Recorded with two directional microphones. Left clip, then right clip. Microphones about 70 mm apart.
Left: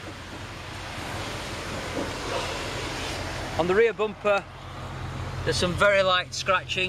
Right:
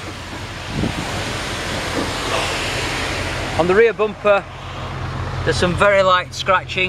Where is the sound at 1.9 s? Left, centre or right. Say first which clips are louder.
Right 8 dB; right.